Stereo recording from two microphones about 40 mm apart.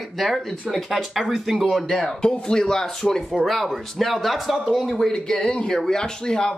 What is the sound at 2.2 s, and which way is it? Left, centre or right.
Speech, centre.